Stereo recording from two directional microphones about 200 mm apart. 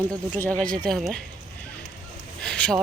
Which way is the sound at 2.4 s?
5° left (ahead or behind).